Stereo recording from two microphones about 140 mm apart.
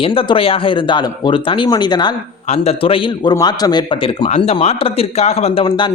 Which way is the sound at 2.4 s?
50° left (ahead or behind).